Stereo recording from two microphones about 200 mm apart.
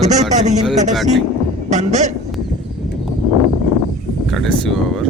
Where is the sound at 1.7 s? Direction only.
35° right (ahead or behind).